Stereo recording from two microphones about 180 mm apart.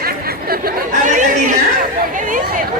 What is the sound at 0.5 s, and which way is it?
Chatter, 50° right (ahead or behind).